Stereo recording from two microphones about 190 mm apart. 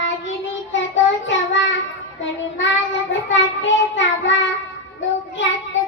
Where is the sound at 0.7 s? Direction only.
75° left (ahead or behind).